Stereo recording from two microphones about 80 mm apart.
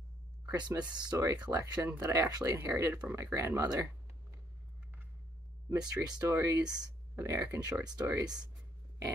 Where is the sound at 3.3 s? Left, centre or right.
Right.